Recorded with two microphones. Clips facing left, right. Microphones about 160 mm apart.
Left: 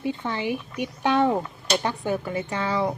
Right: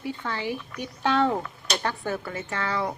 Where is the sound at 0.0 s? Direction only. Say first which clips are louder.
Left 4 dB; 20° left (ahead or behind).